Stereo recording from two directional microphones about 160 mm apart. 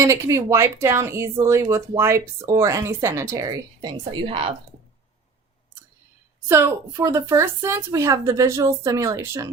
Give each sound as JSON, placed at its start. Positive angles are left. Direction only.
{"t": 0.0, "sound": "a woman's voice", "side_deg": -20}
{"t": 6.5, "sound": "a woman's voice", "side_deg": -15}